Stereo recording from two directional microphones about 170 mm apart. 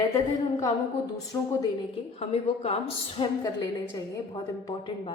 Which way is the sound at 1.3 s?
15° left (ahead or behind).